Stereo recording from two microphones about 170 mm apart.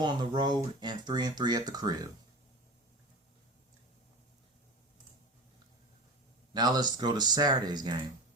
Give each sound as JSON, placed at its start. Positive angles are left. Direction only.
{"t": 0.0, "sound": "speech", "side_deg": -25}
{"t": 6.5, "sound": "speech", "side_deg": -25}